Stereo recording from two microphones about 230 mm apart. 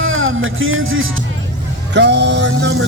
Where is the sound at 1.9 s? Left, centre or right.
Right.